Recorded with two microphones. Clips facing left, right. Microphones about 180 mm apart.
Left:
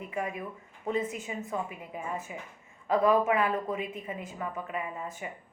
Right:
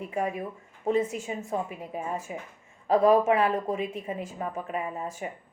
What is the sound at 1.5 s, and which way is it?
Speech, 40° right (ahead or behind).